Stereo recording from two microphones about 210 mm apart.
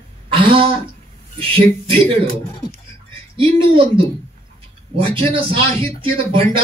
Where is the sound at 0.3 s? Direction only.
25° right (ahead or behind).